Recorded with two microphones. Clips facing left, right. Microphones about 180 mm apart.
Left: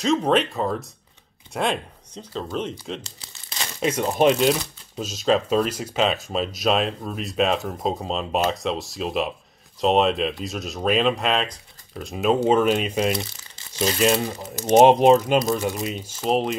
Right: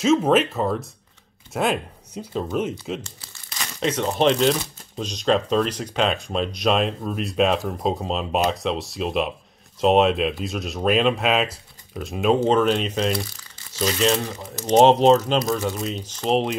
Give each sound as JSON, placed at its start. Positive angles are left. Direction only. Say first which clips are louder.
{"t": 0.0, "sound": "speech", "louder": "right 2 dB", "side_deg": -5}
{"t": 3.8, "sound": "speech", "louder": "left 1 dB", "side_deg": 10}
{"t": 13.1, "sound": "crumpling", "louder": "right 1 dB", "side_deg": 20}
{"t": 13.9, "sound": "speech", "louder": "left 1 dB", "side_deg": 10}